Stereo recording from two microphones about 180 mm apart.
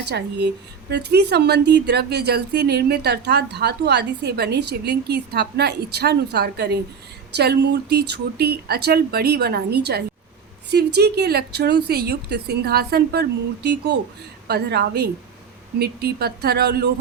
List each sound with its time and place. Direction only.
0.0 s speech: 70° right (ahead or behind)